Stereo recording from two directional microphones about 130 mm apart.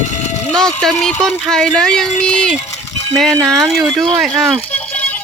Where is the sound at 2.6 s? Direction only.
60° left (ahead or behind).